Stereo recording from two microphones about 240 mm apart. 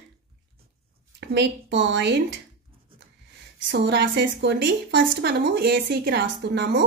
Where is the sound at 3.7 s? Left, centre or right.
Right.